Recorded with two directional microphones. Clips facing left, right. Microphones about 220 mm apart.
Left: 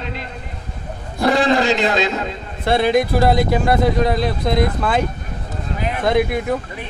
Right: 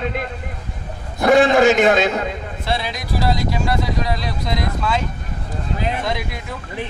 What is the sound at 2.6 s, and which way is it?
Speech, 55° left (ahead or behind).